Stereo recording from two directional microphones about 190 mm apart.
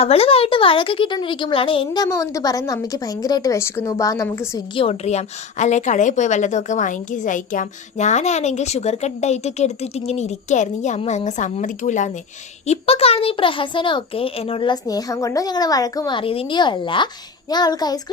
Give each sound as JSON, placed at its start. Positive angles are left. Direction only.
{"t": 0.0, "sound": "speech", "side_deg": 30}
{"t": 4.7, "sound": "a woman's voice", "side_deg": 30}